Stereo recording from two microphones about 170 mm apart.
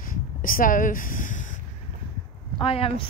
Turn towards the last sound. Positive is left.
turn(degrees=35)  # may be behind; listen again after turning